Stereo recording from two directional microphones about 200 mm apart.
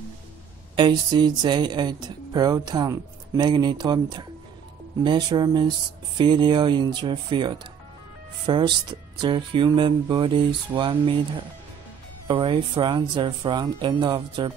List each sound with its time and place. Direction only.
0.7 s speech: 20° right (ahead or behind)
12.3 s speech: 25° right (ahead or behind)